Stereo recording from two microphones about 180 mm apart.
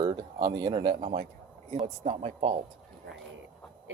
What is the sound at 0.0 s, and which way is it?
Speech, 25° right (ahead or behind).